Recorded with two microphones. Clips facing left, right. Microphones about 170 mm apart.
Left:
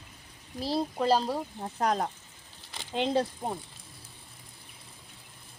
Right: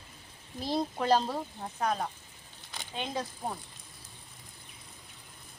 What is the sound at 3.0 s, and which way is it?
Speech, 30° left (ahead or behind).